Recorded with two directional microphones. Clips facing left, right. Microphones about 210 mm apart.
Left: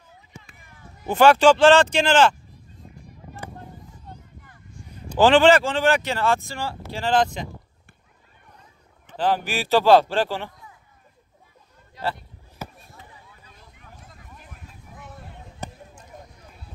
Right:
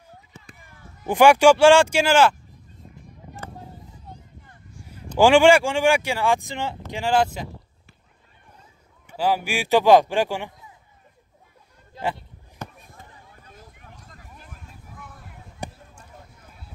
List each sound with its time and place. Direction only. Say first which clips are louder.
1.0 s speech: right 1 dB; 15° right (ahead or behind)
4.8 s speech: right 1 dB; 10° right (ahead or behind)
9.0 s speech: even; 10° right (ahead or behind)
12.6 s a sound: even; 5° left (ahead or behind)
12.9 s a sound: even; 45° right (ahead or behind)
15.6 s basketball bounce: right 1 dB; 15° right (ahead or behind)